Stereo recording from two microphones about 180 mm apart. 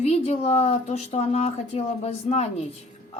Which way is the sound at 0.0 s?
35° left (ahead or behind).